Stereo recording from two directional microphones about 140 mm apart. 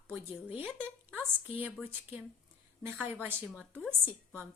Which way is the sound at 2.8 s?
15° right (ahead or behind).